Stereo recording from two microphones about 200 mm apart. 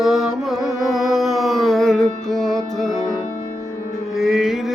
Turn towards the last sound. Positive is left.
turn(degrees=0)  # may be behind; listen again after turning